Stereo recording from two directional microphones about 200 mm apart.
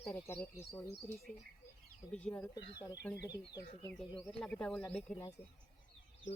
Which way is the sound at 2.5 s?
20° left (ahead or behind).